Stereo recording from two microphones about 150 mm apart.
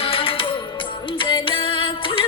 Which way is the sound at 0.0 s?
40° left (ahead or behind).